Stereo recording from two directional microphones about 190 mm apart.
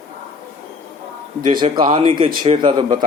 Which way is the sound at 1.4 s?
25° right (ahead or behind).